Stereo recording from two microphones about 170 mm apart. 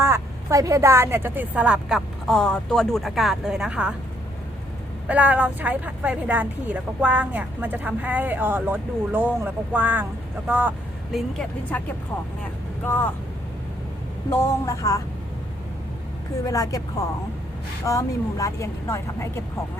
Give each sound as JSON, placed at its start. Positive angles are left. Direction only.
{"t": 0.0, "sound": "a woman's voice", "side_deg": -15}
{"t": 5.0, "sound": "speech", "side_deg": -10}
{"t": 12.8, "sound": "speech", "side_deg": 10}
{"t": 14.3, "sound": "a woman's voice", "side_deg": 20}
{"t": 16.4, "sound": "a woman's voice", "side_deg": 20}
{"t": 17.8, "sound": "speech", "side_deg": 20}